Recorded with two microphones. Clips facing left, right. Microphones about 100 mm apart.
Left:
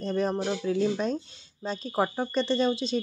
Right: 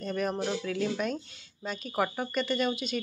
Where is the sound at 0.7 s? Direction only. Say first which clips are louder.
Left 4 dB; 30° left (ahead or behind).